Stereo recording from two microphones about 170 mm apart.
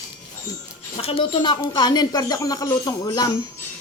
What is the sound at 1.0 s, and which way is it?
Speech, 35° left (ahead or behind).